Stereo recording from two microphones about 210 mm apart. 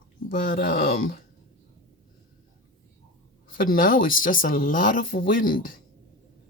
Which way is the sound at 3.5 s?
40° left (ahead or behind).